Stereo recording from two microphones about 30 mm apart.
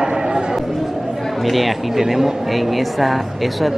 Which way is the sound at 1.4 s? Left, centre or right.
Centre.